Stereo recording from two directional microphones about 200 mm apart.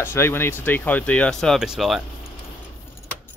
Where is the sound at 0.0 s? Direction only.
10° left (ahead or behind).